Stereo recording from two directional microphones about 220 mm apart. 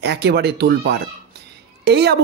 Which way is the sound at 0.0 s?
50° right (ahead or behind).